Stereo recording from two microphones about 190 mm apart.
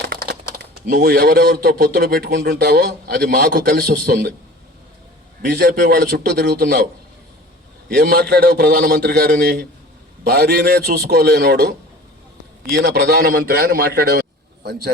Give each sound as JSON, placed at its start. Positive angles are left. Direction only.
{"t": 0.6, "sound": "speech", "side_deg": -50}
{"t": 5.5, "sound": "speech", "side_deg": -55}
{"t": 7.9, "sound": "speech", "side_deg": -55}
{"t": 12.7, "sound": "a man's voice", "side_deg": -55}